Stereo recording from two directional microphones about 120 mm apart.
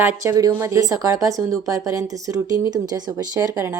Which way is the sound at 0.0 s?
15° right (ahead or behind).